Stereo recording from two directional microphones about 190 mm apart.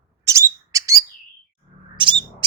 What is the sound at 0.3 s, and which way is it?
Bird, 15° right (ahead or behind).